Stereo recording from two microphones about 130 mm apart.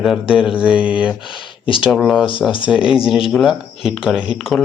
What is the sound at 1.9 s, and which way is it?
A man's voice, centre (ahead or behind).